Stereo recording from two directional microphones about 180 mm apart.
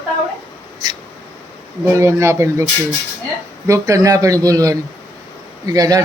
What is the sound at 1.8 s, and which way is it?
Speech, 15° right (ahead or behind).